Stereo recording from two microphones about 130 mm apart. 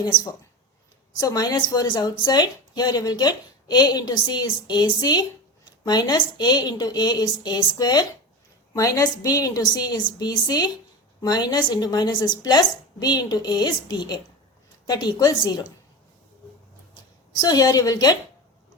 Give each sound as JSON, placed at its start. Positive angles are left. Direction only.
{"t": 0.0, "sound": "speech", "side_deg": 30}
{"t": 17.4, "sound": "a woman's voice", "side_deg": 30}